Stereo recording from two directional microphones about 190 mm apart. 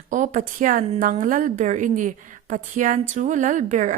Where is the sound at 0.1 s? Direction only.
40° right (ahead or behind).